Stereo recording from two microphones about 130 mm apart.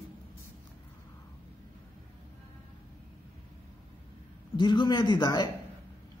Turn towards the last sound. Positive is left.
turn(degrees=30)  # may be behind; listen again after turning